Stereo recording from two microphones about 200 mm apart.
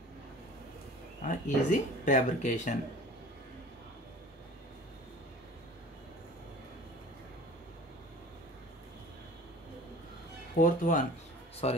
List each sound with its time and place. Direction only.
1.3 s speech: 40° left (ahead or behind)
10.6 s speech: 45° left (ahead or behind)